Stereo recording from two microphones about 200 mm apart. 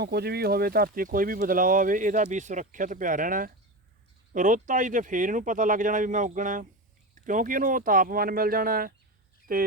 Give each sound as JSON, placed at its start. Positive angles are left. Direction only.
{"t": 0.0, "sound": "speech", "side_deg": -55}